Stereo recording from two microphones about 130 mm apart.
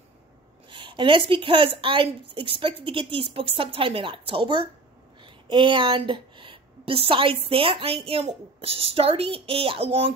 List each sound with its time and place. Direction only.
0.7 s a woman's voice: 40° right (ahead or behind)
5.2 s a sound: 40° right (ahead or behind)
6.9 s a woman's voice: 45° right (ahead or behind)